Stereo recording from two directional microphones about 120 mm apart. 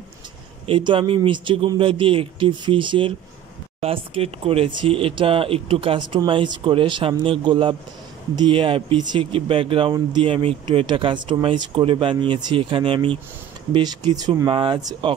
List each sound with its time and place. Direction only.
0.7 s speech: 45° right (ahead or behind)
13.7 s speech: 35° right (ahead or behind)
14.5 s speech: 40° right (ahead or behind)